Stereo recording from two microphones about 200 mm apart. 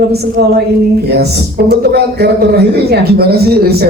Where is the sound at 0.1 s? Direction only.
55° right (ahead or behind).